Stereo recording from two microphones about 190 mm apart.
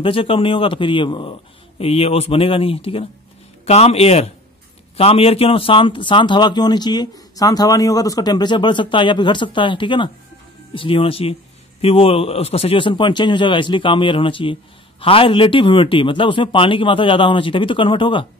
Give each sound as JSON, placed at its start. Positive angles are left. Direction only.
{"t": 0.0, "sound": "a man's voice", "side_deg": 30}